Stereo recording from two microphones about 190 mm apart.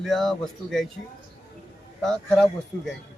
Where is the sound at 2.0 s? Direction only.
5° left (ahead or behind).